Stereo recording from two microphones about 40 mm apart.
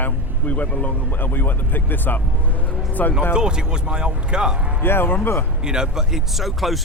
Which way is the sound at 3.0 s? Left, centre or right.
Left.